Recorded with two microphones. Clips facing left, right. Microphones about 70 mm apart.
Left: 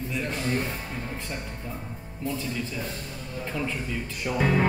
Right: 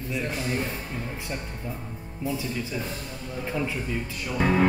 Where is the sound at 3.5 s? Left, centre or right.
Centre.